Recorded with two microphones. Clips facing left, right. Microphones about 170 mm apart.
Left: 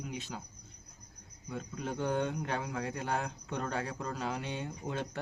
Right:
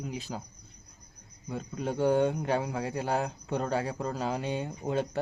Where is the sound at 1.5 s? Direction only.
30° right (ahead or behind).